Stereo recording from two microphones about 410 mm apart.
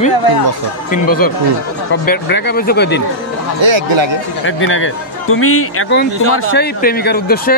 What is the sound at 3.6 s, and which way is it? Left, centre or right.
Speech, right.